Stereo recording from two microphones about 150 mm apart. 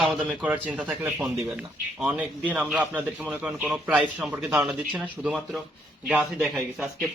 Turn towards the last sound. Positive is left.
turn(degrees=-5)  # may be behind; listen again after turning